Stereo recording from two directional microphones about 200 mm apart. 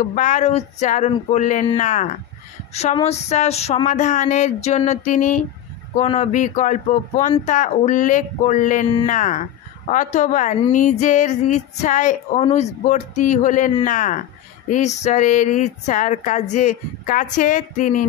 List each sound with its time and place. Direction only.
0.0 s speech: 40° left (ahead or behind)